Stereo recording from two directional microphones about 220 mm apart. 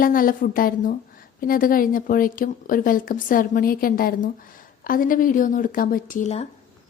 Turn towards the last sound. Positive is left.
turn(degrees=30)  # may be behind; listen again after turning